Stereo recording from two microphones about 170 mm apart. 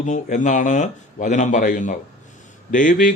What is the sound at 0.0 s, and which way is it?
A man's voice, 50° left (ahead or behind).